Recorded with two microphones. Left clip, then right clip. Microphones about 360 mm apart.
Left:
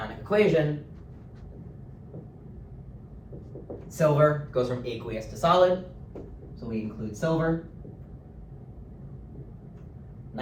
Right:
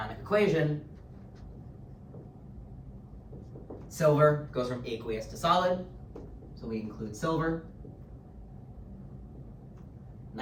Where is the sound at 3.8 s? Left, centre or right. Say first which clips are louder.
Left 2 dB; centre.